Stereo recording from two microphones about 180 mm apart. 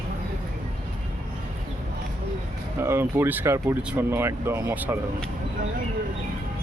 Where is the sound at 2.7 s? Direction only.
15° right (ahead or behind).